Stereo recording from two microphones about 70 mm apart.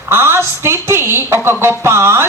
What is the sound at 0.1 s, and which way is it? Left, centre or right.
A woman's voice, right.